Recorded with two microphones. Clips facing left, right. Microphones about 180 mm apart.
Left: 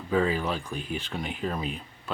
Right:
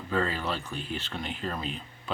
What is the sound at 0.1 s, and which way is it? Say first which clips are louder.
Speech: left 4 dB; 10° left (ahead or behind).